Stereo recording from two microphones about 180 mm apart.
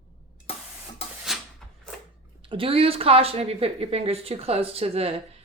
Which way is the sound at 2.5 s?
30° right (ahead or behind).